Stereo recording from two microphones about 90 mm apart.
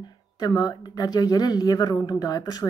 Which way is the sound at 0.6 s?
50° left (ahead or behind).